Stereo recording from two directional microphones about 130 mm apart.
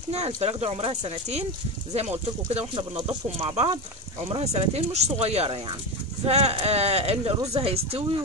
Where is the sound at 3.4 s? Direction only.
45° right (ahead or behind).